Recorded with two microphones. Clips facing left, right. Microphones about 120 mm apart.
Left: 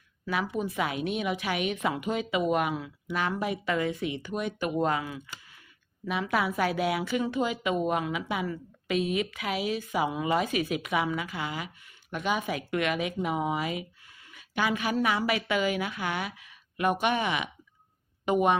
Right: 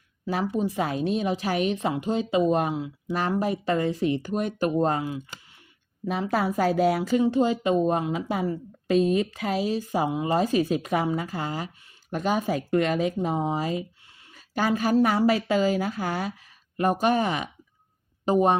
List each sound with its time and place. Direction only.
0.3 s a woman's voice: 35° right (ahead or behind)
6.1 s a woman's voice: 35° right (ahead or behind)